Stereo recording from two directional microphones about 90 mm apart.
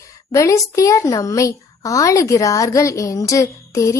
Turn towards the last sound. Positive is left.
turn(degrees=35)  # may be behind; listen again after turning